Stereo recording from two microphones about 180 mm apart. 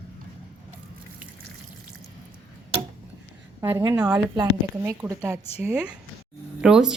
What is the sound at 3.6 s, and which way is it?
Speech, 15° right (ahead or behind).